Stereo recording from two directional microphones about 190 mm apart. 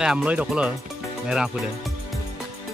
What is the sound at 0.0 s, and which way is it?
Speech, 5° right (ahead or behind).